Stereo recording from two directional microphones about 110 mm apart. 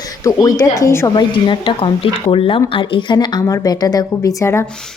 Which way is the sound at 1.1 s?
45° left (ahead or behind).